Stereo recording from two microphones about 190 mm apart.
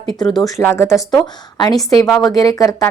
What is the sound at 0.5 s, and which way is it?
Speech, 10° left (ahead or behind).